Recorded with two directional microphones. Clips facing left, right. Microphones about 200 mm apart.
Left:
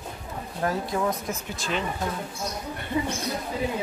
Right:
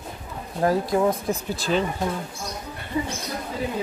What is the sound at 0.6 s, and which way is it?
Speech, 30° right (ahead or behind).